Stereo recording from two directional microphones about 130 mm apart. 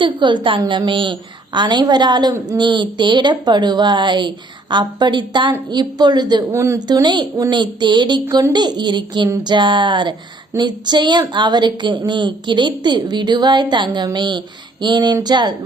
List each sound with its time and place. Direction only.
0.0 s a woman's voice: 35° right (ahead or behind)
6.5 s a woman's voice: 20° right (ahead or behind)
6.7 s a woman's voice: 30° right (ahead or behind)